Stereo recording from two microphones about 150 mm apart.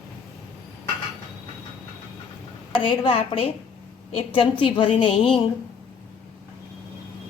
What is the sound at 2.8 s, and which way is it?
A woman's voice, 35° left (ahead or behind).